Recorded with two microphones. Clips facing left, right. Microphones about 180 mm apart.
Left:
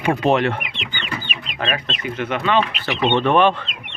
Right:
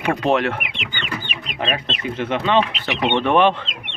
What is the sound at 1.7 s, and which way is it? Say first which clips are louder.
Speech: right 1 dB; 30° right (ahead or behind).